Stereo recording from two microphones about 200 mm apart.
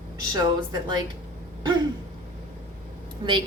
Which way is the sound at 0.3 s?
20° right (ahead or behind).